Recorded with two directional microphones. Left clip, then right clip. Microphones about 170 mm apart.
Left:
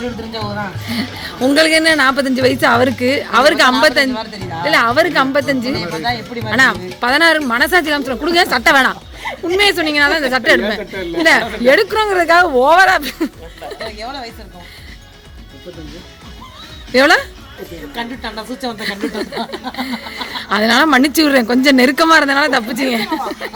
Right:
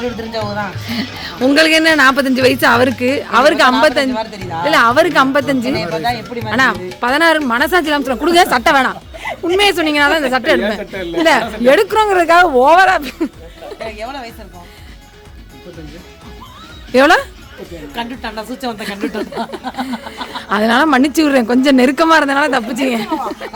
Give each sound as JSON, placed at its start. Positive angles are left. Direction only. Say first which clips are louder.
{"t": 0.0, "sound": "a man's voice", "louder": "right 3 dB", "side_deg": -15}
{"t": 0.9, "sound": "a man's voice", "louder": "even", "side_deg": -5}
{"t": 4.6, "sound": "a woman's voice", "louder": "right 2 dB", "side_deg": -15}
{"t": 5.9, "sound": "a woman's voice", "louder": "right 2 dB", "side_deg": -5}
{"t": 8.7, "sound": "speech", "louder": "left 1 dB", "side_deg": -5}
{"t": 9.6, "sound": "a man's voice", "louder": "even", "side_deg": -20}
{"t": 14.0, "sound": "a woman's voice", "louder": "right 1 dB", "side_deg": 5}
{"t": 16.9, "sound": "a woman's voice", "louder": "right 1 dB", "side_deg": -20}
{"t": 17.9, "sound": "a woman's voice", "louder": "right 1 dB", "side_deg": 0}